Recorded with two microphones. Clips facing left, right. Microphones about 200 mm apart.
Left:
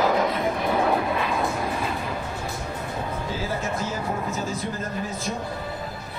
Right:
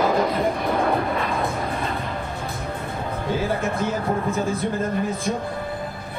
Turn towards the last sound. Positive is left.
turn(degrees=-55)  # may be behind; listen again after turning